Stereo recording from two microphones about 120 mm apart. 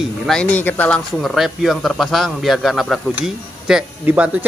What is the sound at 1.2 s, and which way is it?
Speech, centre (ahead or behind).